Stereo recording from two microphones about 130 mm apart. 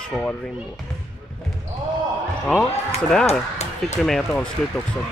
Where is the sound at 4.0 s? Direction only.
5° left (ahead or behind).